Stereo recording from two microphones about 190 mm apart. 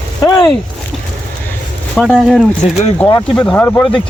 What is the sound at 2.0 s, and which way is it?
Speech, centre (ahead or behind).